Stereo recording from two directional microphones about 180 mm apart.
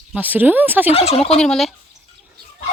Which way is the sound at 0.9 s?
35° left (ahead or behind).